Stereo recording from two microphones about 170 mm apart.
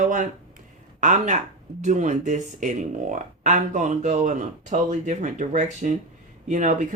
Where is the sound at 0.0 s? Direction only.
50° right (ahead or behind).